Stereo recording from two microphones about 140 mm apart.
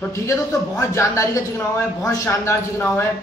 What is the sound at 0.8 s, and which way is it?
Speech, 20° left (ahead or behind).